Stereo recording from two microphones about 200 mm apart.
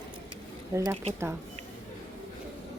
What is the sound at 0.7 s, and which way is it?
Speech, 15° right (ahead or behind).